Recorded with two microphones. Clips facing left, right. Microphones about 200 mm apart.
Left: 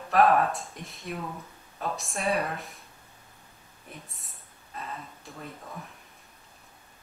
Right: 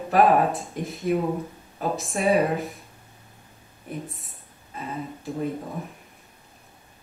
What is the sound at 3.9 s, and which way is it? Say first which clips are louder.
Speech: right 12 dB; centre (ahead or behind).